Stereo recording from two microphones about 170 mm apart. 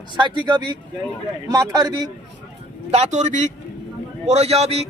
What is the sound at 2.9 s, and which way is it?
A man's voice, 40° right (ahead or behind).